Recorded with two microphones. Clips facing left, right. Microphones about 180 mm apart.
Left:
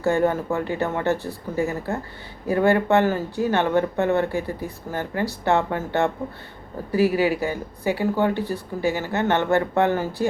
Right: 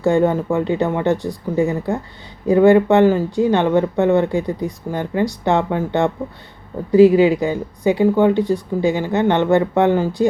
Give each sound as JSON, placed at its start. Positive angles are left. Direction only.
{"t": 0.0, "sound": "speech", "side_deg": -15}